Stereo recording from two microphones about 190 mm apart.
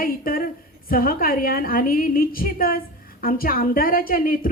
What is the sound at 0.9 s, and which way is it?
A woman's voice, 50° left (ahead or behind).